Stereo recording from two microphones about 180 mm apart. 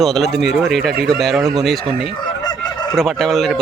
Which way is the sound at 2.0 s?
25° left (ahead or behind).